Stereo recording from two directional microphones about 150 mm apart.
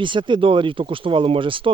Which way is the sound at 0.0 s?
35° right (ahead or behind).